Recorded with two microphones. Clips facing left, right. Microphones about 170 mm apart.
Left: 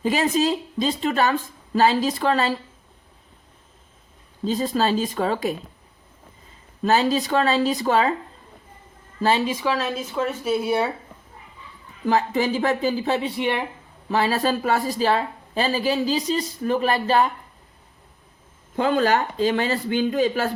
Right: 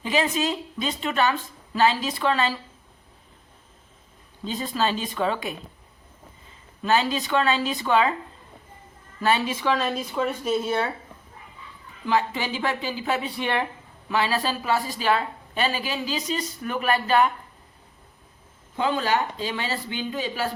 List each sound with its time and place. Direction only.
0.0 s a woman's voice: 40° left (ahead or behind)
4.4 s a woman's voice: 40° left (ahead or behind)
6.8 s a woman's voice: 40° left (ahead or behind)
9.5 s speech: 10° left (ahead or behind)
12.0 s a woman's voice: 40° left (ahead or behind); by 13.7 s 15° left (ahead or behind)
14.1 s a woman's voice: 40° left (ahead or behind)
18.8 s speech: 45° left (ahead or behind)